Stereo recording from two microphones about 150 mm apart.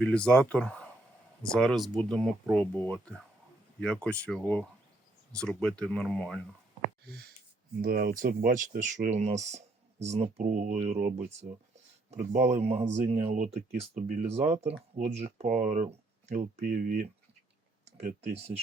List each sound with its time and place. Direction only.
0.0 s speech: 5° left (ahead or behind)
7.8 s speech: 90° right; by 18.5 s 50° right (ahead or behind)